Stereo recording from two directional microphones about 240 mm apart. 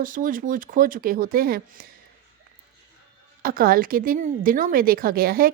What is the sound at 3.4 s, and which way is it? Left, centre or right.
Speech, right.